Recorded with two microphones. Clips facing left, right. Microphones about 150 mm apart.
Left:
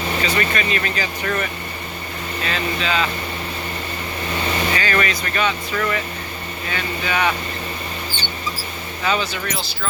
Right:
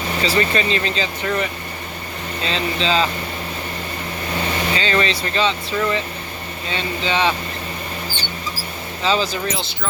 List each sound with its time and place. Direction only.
0.2 s speech: 30° right (ahead or behind)
4.7 s speech: 25° right (ahead or behind)
9.0 s speech: 30° right (ahead or behind)